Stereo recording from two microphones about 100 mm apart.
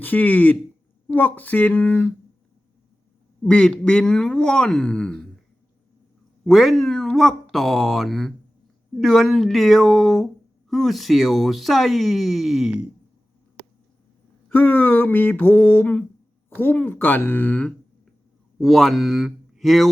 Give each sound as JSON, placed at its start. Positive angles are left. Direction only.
{"t": 0.0, "sound": "speech", "side_deg": 15}
{"t": 3.4, "sound": "speech", "side_deg": 10}
{"t": 6.4, "sound": "speech", "side_deg": 0}
{"t": 14.5, "sound": "a sound", "side_deg": 20}
{"t": 18.6, "sound": "speech", "side_deg": 0}